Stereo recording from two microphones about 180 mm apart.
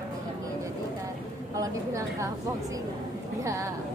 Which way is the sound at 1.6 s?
15° right (ahead or behind).